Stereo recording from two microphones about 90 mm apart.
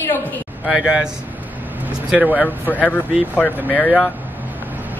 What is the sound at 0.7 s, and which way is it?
Speech, 10° right (ahead or behind).